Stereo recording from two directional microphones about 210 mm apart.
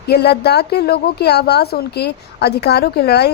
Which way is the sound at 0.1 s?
50° left (ahead or behind).